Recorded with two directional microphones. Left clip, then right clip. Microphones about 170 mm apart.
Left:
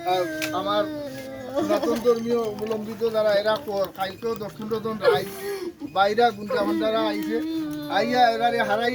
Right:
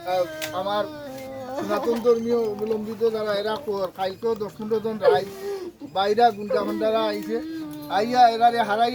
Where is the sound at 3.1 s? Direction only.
10° right (ahead or behind).